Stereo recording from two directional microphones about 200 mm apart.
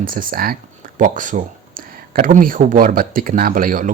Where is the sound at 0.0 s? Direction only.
45° right (ahead or behind).